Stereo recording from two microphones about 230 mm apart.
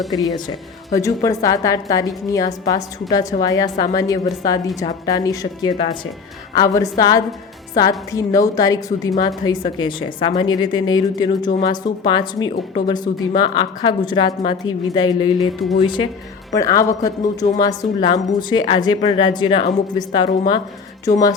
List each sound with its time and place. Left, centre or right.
0.1 s a woman's voice: centre
11.3 s speech: left
11.6 s a woman's voice: centre